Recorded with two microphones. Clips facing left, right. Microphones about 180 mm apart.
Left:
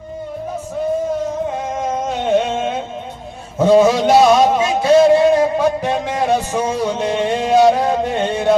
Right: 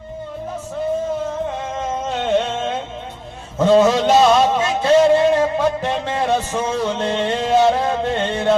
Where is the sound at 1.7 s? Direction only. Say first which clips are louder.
Left 3 dB; 10° left (ahead or behind).